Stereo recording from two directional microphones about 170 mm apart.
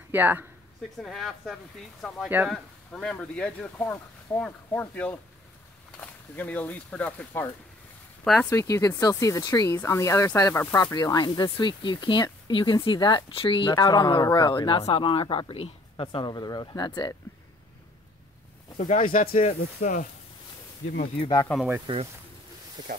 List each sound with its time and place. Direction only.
0.1 s speech: 10° right (ahead or behind)
1.0 s speech: centre (ahead or behind)
2.2 s speech: 10° right (ahead or behind)
2.5 s speech: 5° left (ahead or behind)
8.5 s speech: 20° left (ahead or behind)
18.8 s speech: 45° left (ahead or behind)
21.5 s speech: 5° left (ahead or behind)
21.9 s speech: 30° right (ahead or behind)